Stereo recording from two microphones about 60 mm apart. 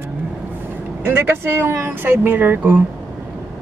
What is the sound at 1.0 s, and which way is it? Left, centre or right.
Speech, right.